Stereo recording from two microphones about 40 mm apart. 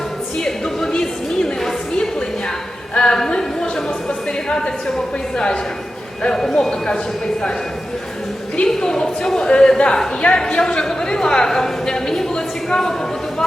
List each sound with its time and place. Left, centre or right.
0.3 s a sound: centre
6.2 s a woman's voice: centre
8.8 s a woman's voice: centre